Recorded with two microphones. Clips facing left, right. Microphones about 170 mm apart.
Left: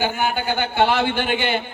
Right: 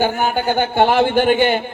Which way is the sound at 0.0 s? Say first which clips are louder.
Right 4 dB; 45° right (ahead or behind).